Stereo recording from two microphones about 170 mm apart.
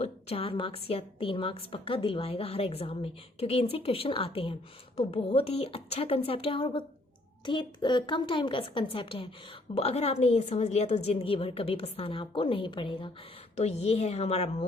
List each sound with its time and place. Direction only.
0.0 s a woman's voice: 35° left (ahead or behind)